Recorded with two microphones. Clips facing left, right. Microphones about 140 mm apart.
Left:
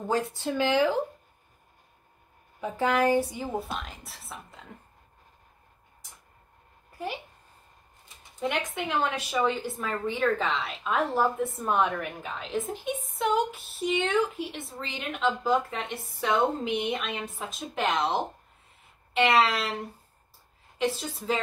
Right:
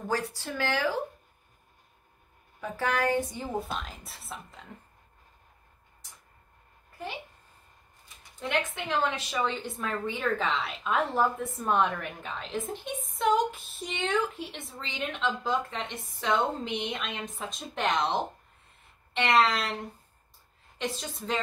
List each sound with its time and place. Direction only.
0.1 s speech: 20° left (ahead or behind)
2.6 s speech: 20° left (ahead or behind)
3.2 s a woman's voice: 5° left (ahead or behind)
8.4 s a woman's voice: 5° left (ahead or behind)